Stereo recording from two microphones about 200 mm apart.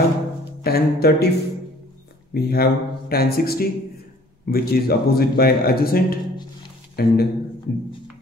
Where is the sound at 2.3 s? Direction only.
50° left (ahead or behind).